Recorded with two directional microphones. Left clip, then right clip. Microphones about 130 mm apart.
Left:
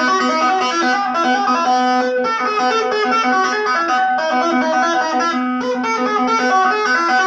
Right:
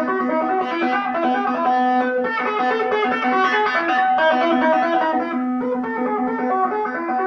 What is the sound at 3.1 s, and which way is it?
Music, 45° right (ahead or behind).